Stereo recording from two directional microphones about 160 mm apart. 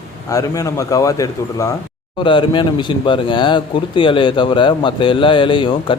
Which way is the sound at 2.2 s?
30° left (ahead or behind).